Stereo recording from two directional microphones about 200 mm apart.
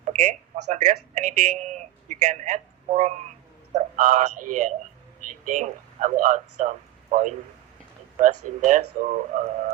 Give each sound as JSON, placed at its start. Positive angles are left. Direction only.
{"t": 0.0, "sound": "a man's voice", "side_deg": -35}